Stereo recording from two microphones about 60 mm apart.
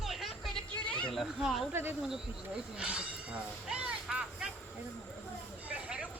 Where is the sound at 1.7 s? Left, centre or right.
Right.